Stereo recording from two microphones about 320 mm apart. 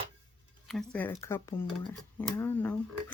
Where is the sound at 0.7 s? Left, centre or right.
Centre.